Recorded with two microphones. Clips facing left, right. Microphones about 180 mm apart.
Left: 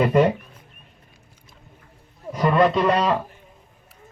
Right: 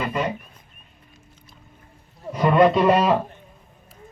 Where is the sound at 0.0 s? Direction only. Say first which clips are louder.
Left 8 dB; 55° left (ahead or behind).